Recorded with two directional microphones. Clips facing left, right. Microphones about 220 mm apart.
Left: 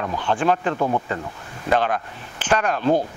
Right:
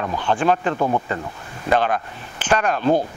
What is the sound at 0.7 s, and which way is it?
Speech, 30° right (ahead or behind).